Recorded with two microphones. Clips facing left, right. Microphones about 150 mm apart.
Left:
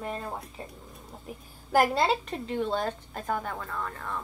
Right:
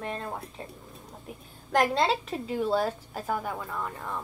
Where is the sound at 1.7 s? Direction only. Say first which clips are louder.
Left 1 dB; 5° left (ahead or behind); by 4.2 s 15° right (ahead or behind).